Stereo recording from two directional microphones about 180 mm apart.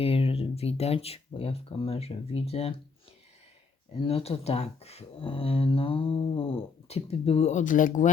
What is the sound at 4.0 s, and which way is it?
Speech, 30° left (ahead or behind).